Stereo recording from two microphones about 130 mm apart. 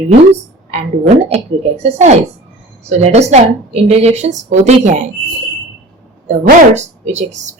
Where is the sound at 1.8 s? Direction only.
65° right (ahead or behind).